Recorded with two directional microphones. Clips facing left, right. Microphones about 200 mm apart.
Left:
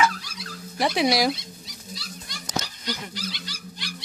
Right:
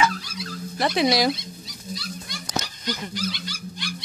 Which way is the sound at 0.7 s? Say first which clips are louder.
Right 1 dB; 10° left (ahead or behind).